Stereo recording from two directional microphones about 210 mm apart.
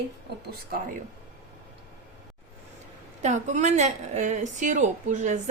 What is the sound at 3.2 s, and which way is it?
A woman's voice, 35° right (ahead or behind).